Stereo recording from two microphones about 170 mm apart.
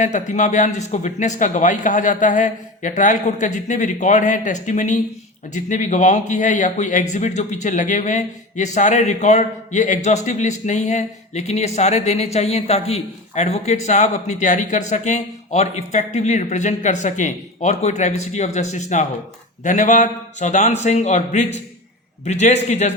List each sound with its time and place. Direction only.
0.0 s speech: 45° left (ahead or behind)